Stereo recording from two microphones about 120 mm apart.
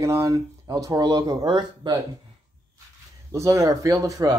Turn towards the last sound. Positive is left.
turn(degrees=-30)  # may be behind; listen again after turning